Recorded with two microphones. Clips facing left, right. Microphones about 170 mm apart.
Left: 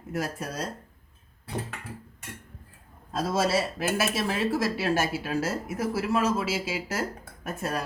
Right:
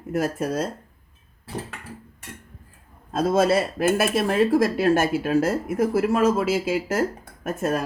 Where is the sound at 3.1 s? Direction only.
50° right (ahead or behind).